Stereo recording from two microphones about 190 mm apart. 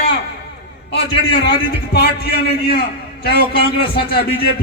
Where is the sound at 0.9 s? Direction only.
60° left (ahead or behind).